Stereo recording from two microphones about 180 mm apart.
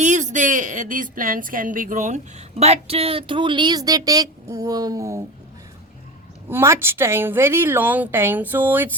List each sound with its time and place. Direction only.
0.0 s a woman's voice: 40° right (ahead or behind); by 5.2 s 20° right (ahead or behind)
6.5 s a woman's voice: 15° right (ahead or behind)